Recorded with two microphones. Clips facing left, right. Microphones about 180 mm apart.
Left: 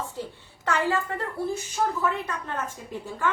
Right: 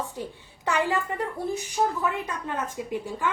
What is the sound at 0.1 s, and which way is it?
A woman's voice, 15° right (ahead or behind).